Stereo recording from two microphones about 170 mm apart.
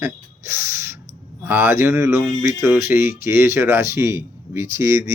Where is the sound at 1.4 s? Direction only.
15° right (ahead or behind).